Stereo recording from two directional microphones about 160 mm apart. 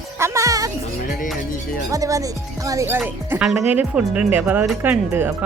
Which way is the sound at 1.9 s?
20° right (ahead or behind).